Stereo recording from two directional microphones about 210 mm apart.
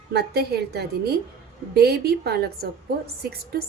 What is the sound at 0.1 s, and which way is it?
A woman's voice, 50° right (ahead or behind).